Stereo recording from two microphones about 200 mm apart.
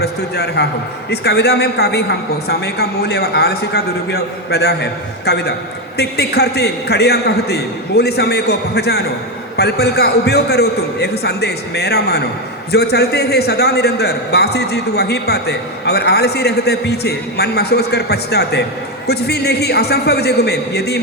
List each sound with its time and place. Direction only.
0.0 s a man's voice: 55° left (ahead or behind)